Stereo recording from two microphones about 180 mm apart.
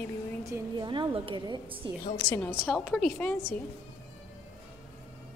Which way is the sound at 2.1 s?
15° left (ahead or behind).